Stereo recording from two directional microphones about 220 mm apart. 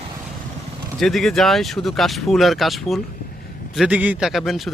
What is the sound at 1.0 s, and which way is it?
Speech, centre (ahead or behind).